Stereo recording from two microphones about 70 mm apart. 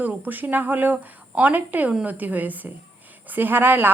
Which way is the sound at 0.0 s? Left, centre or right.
Right.